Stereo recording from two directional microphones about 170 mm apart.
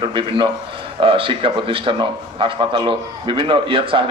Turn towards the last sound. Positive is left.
turn(degrees=-30)  # may be behind; listen again after turning